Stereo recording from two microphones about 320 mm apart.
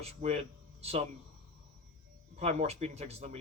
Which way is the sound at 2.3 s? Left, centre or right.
Centre.